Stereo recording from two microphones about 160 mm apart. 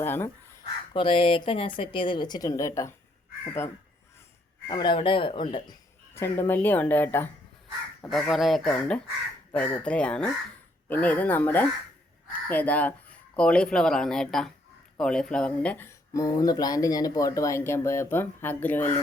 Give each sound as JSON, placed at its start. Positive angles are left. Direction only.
{"t": 0.0, "sound": "speech", "side_deg": 15}
{"t": 0.9, "sound": "a woman's voice", "side_deg": 35}
{"t": 4.7, "sound": "a woman's voice", "side_deg": 30}
{"t": 6.1, "sound": "speech", "side_deg": 15}
{"t": 8.0, "sound": "speech", "side_deg": 0}
{"t": 16.1, "sound": "speech", "side_deg": 20}